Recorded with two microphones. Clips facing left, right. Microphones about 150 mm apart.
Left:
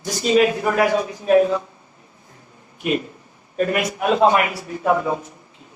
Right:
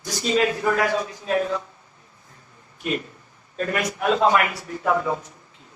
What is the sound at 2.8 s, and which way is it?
A man's voice, 15° left (ahead or behind).